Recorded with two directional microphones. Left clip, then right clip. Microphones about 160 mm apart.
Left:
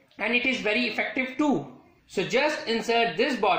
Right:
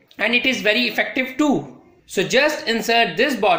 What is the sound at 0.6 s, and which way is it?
Speech, 15° right (ahead or behind).